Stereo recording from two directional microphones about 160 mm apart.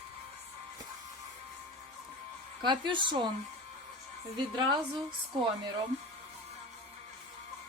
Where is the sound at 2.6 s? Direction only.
30° right (ahead or behind).